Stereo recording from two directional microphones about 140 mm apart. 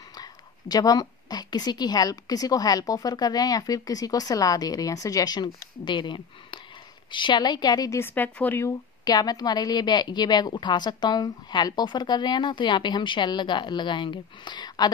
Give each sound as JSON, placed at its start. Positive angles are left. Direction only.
{"t": 0.1, "sound": "a woman's voice", "side_deg": 30}
{"t": 8.0, "sound": "a woman's voice", "side_deg": 15}